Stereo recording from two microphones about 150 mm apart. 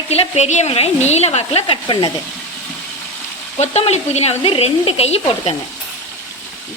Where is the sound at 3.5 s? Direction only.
45° left (ahead or behind).